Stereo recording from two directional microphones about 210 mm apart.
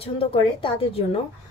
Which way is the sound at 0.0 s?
25° left (ahead or behind).